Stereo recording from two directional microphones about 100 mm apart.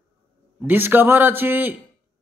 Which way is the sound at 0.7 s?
20° right (ahead or behind).